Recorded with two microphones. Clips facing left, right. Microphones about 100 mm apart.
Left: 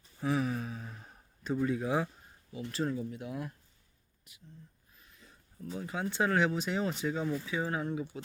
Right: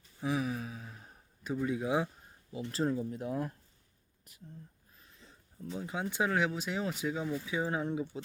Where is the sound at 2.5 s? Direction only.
30° right (ahead or behind).